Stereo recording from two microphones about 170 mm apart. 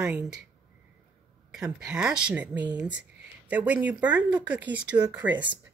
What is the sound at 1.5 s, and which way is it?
Speech, 5° right (ahead or behind).